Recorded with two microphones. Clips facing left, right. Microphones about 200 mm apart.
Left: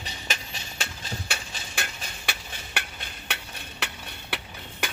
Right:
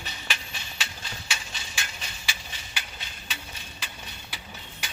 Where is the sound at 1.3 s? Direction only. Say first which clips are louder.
Left 2 dB; 60° left (ahead or behind).